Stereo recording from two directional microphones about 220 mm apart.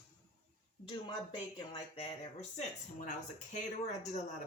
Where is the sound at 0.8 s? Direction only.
20° left (ahead or behind).